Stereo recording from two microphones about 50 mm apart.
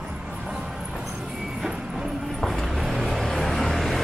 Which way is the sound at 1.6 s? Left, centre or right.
Centre.